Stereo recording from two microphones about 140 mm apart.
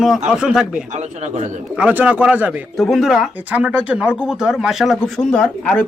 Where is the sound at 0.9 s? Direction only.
55° right (ahead or behind).